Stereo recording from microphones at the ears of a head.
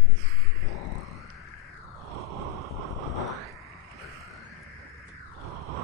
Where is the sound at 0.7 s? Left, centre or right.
Left.